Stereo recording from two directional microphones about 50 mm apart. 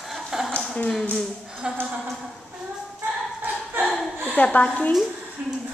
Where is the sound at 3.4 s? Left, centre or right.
Right.